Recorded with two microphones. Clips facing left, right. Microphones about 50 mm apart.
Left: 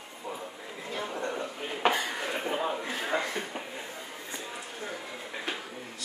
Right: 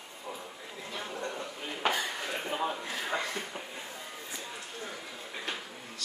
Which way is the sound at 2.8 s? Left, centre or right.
Left.